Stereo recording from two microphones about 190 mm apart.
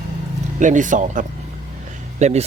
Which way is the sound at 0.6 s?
40° right (ahead or behind).